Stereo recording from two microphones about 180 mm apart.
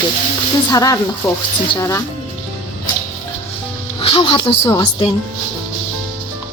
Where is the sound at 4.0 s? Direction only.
30° left (ahead or behind).